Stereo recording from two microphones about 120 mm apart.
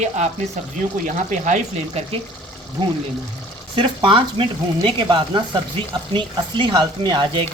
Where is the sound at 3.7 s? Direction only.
45° right (ahead or behind).